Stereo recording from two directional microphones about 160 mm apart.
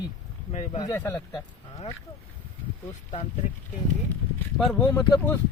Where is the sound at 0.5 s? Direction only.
45° left (ahead or behind).